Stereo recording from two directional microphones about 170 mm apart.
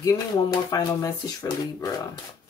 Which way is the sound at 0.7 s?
20° left (ahead or behind).